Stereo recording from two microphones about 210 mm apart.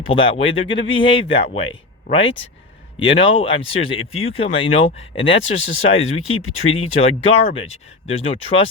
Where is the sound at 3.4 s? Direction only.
25° left (ahead or behind).